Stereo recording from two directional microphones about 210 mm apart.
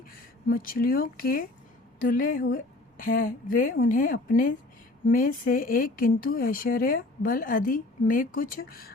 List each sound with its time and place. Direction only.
0.4 s speech: 45° left (ahead or behind)